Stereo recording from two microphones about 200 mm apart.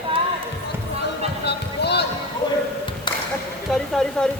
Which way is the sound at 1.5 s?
55° left (ahead or behind).